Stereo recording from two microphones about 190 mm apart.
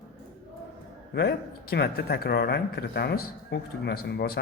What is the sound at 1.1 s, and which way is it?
Speech, 60° left (ahead or behind).